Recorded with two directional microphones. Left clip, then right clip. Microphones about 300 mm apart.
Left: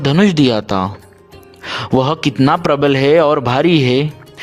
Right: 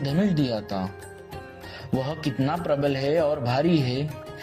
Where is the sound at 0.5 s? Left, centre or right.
Left.